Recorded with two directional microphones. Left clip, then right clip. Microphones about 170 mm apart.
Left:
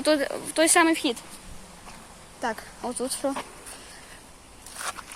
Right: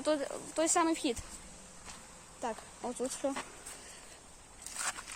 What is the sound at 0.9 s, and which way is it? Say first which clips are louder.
Speech: left 8 dB; 20° right (ahead or behind).